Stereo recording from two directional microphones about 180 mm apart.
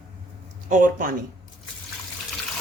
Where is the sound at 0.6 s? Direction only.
45° right (ahead or behind).